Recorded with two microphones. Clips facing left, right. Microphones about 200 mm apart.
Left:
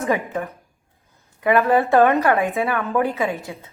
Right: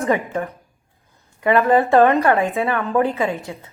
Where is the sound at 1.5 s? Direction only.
Centre (ahead or behind).